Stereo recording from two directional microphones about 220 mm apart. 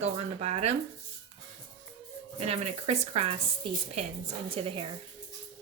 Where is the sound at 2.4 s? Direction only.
30° right (ahead or behind).